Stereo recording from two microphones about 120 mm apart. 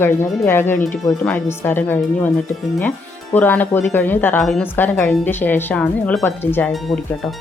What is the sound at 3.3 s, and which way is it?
Speech, 15° left (ahead or behind).